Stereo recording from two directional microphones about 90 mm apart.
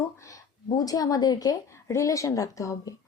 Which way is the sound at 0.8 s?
45° left (ahead or behind).